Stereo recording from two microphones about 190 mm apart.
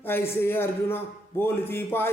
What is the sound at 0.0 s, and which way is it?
A man's voice, 10° left (ahead or behind).